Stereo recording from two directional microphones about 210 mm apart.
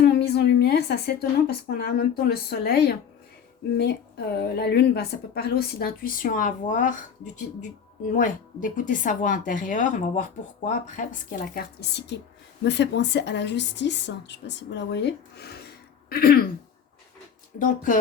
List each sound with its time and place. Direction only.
0.0 s a woman's voice: 50° left (ahead or behind)
17.6 s a woman's voice: 40° left (ahead or behind)